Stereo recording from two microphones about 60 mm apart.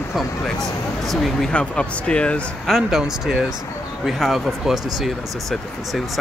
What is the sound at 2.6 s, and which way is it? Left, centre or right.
Speech, centre.